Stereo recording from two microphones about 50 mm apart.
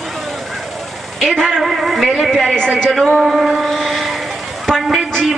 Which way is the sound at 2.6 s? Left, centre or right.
Right.